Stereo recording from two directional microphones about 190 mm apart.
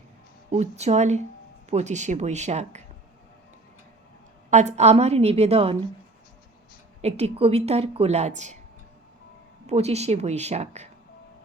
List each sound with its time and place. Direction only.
0.5 s a woman's voice: 35° right (ahead or behind)
4.5 s a woman's voice: 35° right (ahead or behind)
7.0 s a woman's voice: 35° right (ahead or behind)
9.6 s a woman's voice: 35° right (ahead or behind)